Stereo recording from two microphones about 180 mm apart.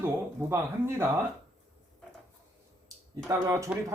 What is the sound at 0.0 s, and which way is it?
Speech, 10° right (ahead or behind).